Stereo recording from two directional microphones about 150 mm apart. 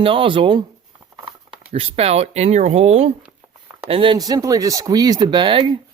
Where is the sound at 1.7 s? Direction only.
40° right (ahead or behind).